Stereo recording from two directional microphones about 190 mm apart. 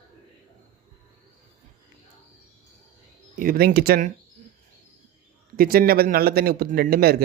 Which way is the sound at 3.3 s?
45° right (ahead or behind).